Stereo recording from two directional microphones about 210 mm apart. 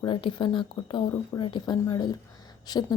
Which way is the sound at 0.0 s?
25° left (ahead or behind).